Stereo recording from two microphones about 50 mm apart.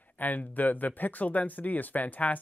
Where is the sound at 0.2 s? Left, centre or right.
Left.